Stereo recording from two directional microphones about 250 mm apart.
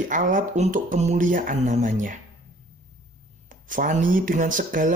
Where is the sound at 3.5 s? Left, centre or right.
Right.